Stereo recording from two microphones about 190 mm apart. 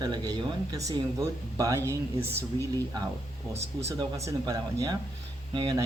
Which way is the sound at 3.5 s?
35° right (ahead or behind).